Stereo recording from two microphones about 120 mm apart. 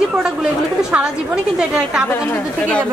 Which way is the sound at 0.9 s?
5° right (ahead or behind).